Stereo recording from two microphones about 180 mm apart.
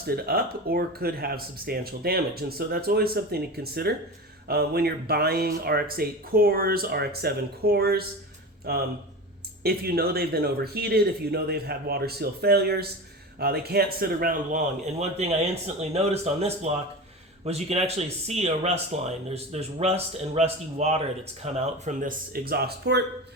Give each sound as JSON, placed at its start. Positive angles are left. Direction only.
{"t": 0.0, "sound": "speech", "side_deg": -60}